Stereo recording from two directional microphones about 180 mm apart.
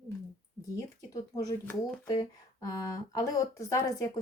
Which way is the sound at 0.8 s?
20° left (ahead or behind).